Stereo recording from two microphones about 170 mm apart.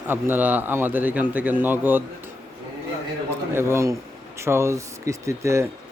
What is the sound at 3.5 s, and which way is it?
A man's voice, 15° right (ahead or behind).